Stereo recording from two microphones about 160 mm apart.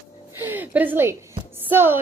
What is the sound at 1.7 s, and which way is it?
Speech, 15° right (ahead or behind).